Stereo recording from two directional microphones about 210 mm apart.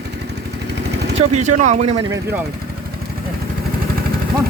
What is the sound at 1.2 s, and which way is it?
Speech, 35° right (ahead or behind).